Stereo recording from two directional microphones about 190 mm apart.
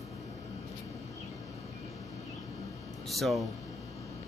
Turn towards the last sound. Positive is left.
turn(degrees=0)  # may be behind; listen again after turning